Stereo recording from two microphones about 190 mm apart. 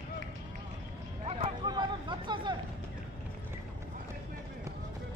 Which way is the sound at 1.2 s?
25° right (ahead or behind).